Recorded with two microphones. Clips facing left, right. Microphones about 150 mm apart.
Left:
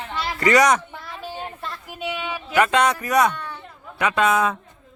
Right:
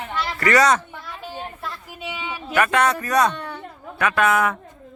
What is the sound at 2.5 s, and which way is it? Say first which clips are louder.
Speech: left 1 dB; 20° left (ahead or behind).